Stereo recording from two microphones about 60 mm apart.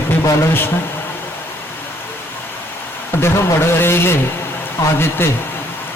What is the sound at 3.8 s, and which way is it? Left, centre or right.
Speech, left.